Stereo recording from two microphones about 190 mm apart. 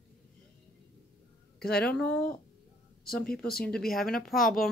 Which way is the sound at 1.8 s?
5° left (ahead or behind).